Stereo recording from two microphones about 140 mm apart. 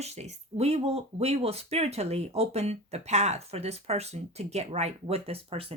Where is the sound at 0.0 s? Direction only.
50° right (ahead or behind).